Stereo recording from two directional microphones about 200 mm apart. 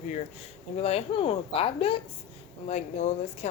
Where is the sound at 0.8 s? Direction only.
30° left (ahead or behind).